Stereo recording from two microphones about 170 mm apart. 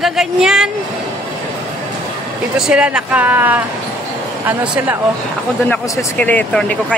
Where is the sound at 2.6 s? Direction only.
5° right (ahead or behind).